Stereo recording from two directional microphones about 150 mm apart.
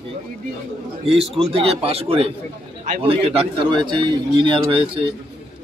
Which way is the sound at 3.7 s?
30° right (ahead or behind).